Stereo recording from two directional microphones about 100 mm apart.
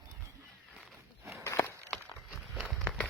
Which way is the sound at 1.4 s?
25° left (ahead or behind).